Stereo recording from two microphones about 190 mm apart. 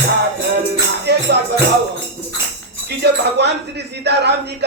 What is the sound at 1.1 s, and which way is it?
Music, 60° right (ahead or behind).